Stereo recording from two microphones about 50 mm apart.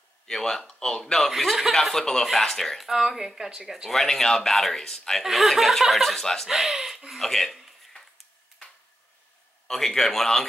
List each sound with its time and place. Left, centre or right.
0.3 s a man's voice: centre
1.3 s speech: centre
2.9 s speech: centre
3.9 s a man's voice: centre
6.5 s speech: centre
7.1 s speech: centre
9.7 s a man's voice: centre